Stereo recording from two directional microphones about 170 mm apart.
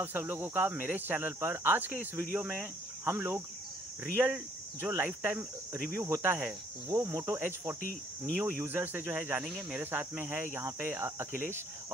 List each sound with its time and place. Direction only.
0.0 s speech: 10° right (ahead or behind)